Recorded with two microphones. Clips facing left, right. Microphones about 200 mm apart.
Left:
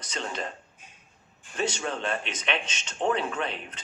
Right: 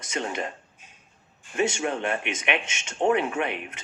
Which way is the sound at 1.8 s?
15° right (ahead or behind).